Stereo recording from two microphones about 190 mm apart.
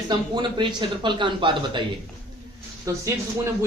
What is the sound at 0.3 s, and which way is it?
A man's voice, 25° right (ahead or behind).